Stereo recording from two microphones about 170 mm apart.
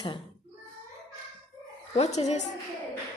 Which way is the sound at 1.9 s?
40° left (ahead or behind).